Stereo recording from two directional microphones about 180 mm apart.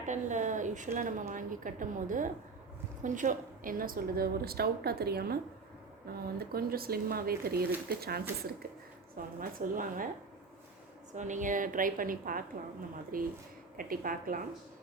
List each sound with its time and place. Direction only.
0.0 s a woman's voice: 45° right (ahead or behind)
11.1 s a woman's voice: 45° right (ahead or behind)